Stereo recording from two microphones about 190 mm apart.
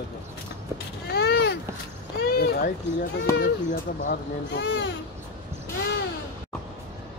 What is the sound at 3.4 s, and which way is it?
Speech, 45° left (ahead or behind).